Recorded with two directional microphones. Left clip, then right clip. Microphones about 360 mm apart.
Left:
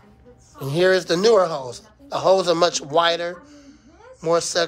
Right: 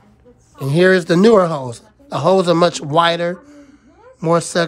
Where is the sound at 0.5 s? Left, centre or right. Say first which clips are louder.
Right 5 dB; centre.